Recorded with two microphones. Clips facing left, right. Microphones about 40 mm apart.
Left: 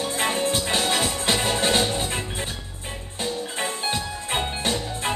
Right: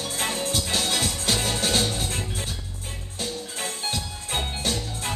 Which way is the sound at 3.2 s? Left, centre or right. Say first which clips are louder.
Left 5 dB; left.